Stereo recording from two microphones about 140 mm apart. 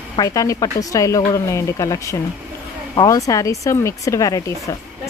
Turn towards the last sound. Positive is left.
turn(degrees=25)  # may be behind; listen again after turning